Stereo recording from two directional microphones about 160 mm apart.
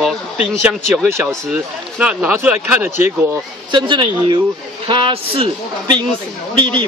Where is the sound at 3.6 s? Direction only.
30° right (ahead or behind).